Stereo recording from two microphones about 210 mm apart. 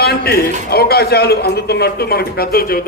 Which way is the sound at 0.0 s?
50° left (ahead or behind).